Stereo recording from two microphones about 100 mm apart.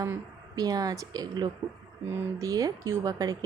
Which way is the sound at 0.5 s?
40° right (ahead or behind).